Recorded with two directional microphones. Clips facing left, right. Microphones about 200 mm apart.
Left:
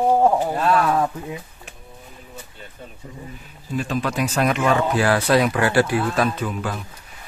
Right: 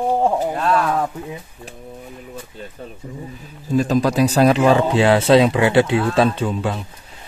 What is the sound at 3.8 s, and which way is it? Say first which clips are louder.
Speech: right 7 dB; 40° right (ahead or behind).